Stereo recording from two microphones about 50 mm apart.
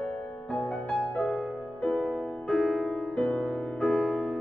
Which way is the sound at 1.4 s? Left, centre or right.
Centre.